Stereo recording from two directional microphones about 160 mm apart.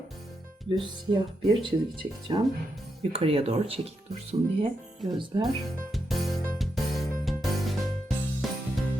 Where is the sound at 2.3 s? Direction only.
25° right (ahead or behind).